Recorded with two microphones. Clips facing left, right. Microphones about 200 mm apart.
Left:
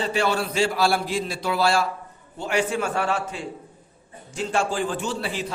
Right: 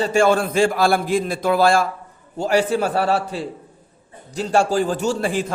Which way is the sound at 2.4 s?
35° right (ahead or behind).